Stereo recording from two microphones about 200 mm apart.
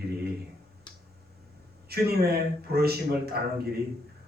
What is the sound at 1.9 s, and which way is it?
A man's voice, 50° right (ahead or behind).